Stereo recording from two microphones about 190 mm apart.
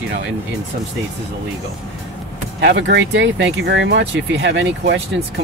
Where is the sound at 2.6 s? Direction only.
70° right (ahead or behind).